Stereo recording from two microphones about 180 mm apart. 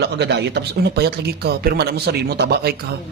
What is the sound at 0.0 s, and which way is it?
Speech, 70° right (ahead or behind).